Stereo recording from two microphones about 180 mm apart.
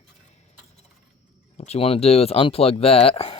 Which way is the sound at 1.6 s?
35° left (ahead or behind).